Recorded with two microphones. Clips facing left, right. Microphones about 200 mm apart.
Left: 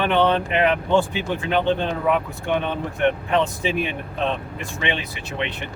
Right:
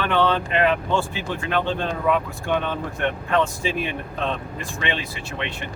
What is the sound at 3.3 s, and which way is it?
Speech, 20° left (ahead or behind).